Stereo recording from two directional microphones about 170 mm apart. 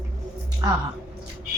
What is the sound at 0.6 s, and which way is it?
Speech, 20° right (ahead or behind).